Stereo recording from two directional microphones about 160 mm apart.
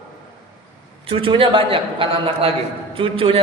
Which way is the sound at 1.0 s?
35° right (ahead or behind).